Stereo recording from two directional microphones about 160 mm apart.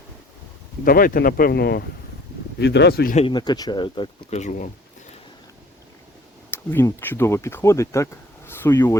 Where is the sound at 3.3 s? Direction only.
25° left (ahead or behind).